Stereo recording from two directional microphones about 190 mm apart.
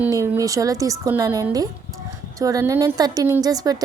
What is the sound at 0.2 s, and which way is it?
A woman's voice, 15° right (ahead or behind).